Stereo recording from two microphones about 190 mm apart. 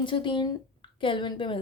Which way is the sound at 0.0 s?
25° left (ahead or behind).